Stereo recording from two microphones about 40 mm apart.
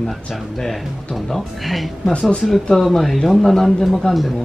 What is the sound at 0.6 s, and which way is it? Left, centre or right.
Speech, centre.